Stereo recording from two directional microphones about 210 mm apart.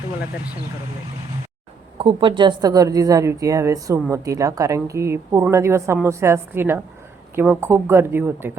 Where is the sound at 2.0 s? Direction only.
25° right (ahead or behind).